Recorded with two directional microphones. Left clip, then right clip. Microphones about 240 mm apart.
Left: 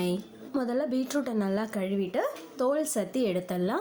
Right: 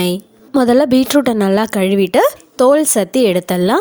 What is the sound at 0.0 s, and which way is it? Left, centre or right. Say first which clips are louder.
A woman's voice: right 13 dB; right.